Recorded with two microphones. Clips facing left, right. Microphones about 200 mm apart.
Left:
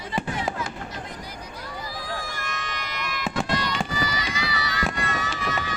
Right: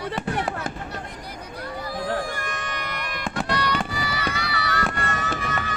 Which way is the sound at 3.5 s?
60° right (ahead or behind).